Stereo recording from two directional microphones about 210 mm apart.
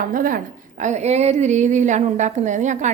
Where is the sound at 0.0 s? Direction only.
40° right (ahead or behind).